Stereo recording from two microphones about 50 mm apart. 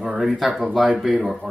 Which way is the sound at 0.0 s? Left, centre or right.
Centre.